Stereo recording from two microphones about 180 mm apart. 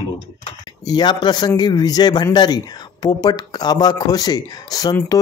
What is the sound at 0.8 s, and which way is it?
Speech, 25° left (ahead or behind).